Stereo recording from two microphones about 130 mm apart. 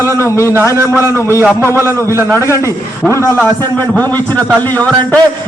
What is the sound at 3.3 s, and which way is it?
A man's voice, 15° left (ahead or behind).